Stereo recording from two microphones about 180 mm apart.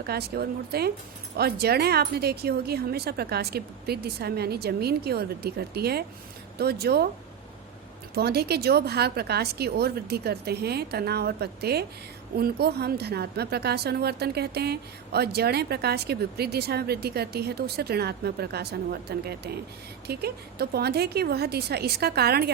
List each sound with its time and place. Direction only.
0.0 s speech: 60° right (ahead or behind)
8.1 s speech: 60° right (ahead or behind)